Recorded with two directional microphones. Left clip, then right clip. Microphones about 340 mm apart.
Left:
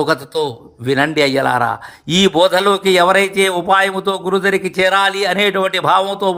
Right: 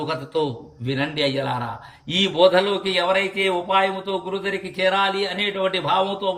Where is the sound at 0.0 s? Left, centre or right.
Centre.